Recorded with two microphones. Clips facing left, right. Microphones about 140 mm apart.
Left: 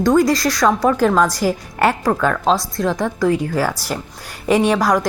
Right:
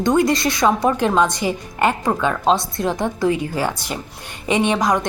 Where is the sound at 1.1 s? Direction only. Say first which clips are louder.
Left 1 dB; 20° right (ahead or behind).